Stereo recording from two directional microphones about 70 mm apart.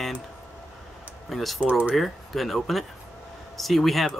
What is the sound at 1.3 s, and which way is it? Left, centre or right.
Speech, centre.